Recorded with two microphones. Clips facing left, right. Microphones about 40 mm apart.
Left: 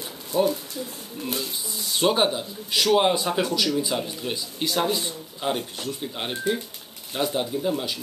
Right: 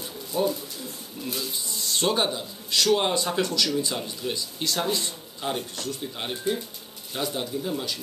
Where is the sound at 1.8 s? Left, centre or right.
Centre.